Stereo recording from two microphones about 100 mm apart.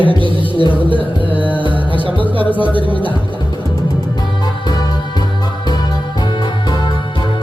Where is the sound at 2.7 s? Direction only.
55° right (ahead or behind).